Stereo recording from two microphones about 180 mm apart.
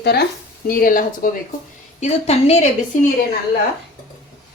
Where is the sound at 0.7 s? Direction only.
50° left (ahead or behind).